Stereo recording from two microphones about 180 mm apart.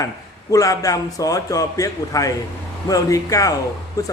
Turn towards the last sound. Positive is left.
turn(degrees=20)  # may be behind; listen again after turning